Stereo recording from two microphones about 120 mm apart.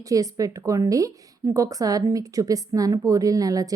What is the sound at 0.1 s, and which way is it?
A woman's voice, 30° right (ahead or behind).